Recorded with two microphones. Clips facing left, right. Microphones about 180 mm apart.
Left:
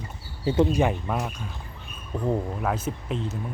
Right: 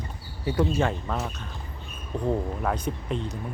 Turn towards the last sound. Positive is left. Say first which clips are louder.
# even
turn(degrees=0)  # may be behind; listen again after turning